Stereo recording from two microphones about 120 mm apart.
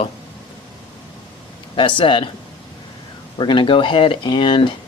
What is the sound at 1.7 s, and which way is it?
Speech, 45° left (ahead or behind).